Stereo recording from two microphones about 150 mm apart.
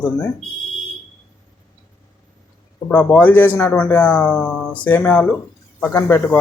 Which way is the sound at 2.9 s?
15° left (ahead or behind).